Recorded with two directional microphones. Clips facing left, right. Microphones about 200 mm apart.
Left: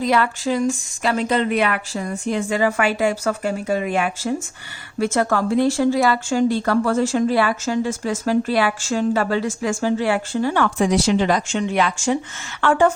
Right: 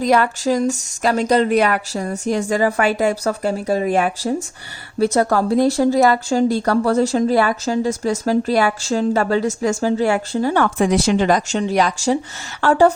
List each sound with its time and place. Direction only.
0.0 s speech: 45° right (ahead or behind)